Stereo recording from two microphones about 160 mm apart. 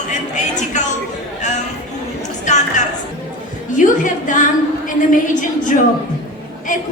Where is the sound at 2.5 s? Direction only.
50° left (ahead or behind).